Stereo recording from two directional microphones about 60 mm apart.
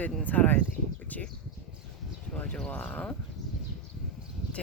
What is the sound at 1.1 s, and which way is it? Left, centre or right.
Bird, left.